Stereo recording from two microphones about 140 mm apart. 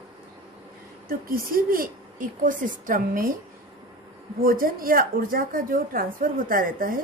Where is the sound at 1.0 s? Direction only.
90° right; by 3.3 s 75° right (ahead or behind).